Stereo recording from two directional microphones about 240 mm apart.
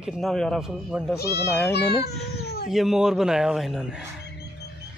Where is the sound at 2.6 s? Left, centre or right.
Centre.